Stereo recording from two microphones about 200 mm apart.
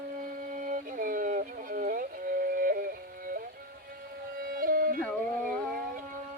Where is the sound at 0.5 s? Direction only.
40° right (ahead or behind).